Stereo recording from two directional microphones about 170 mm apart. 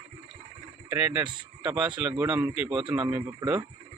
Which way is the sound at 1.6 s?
5° right (ahead or behind).